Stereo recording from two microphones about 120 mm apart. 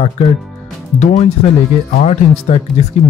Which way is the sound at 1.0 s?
80° left.